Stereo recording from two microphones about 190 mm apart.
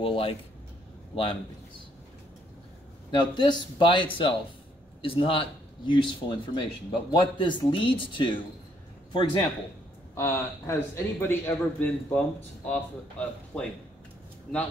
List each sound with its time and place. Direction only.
0.0 s speech: 30° left (ahead or behind)
3.1 s speech: 25° left (ahead or behind)
10.1 s a man's voice: 15° left (ahead or behind)